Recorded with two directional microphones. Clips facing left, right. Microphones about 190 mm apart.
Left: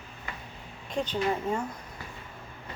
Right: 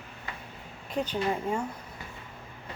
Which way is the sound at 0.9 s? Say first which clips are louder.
Even; 10° right (ahead or behind).